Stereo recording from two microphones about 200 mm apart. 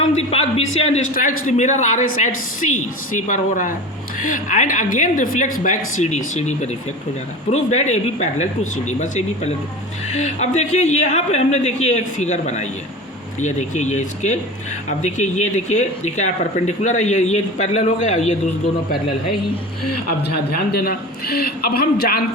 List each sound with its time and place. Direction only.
0.2 s speech: 30° left (ahead or behind)
1.1 s a man's voice: 45° left (ahead or behind)
3.2 s speech: 40° left (ahead or behind)
20.1 s a man's voice: 50° left (ahead or behind)